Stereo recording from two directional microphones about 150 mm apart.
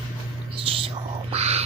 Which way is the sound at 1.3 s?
45° right (ahead or behind).